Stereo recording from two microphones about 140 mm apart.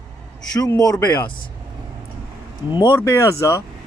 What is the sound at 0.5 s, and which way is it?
Speech, 25° left (ahead or behind).